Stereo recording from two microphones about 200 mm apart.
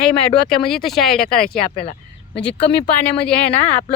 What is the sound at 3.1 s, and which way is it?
Speech, 5° left (ahead or behind).